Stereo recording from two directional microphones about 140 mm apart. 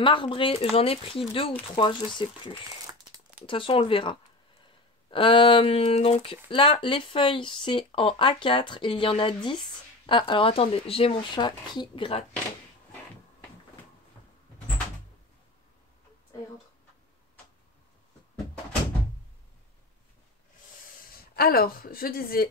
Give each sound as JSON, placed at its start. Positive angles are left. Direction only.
{"t": 0.0, "sound": "speech", "side_deg": 35}
{"t": 21.4, "sound": "a woman's voice", "side_deg": 90}